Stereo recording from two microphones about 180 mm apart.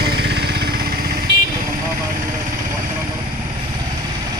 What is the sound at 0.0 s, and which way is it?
Vehicle, 65° right (ahead or behind).